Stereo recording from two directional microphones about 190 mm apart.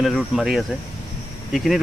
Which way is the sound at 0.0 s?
Centre (ahead or behind).